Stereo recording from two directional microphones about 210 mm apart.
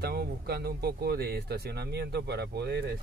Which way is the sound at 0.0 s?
50° right (ahead or behind).